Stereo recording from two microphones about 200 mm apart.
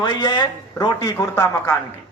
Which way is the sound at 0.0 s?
20° left (ahead or behind).